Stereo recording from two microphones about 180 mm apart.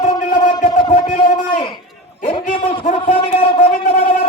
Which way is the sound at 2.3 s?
30° left (ahead or behind).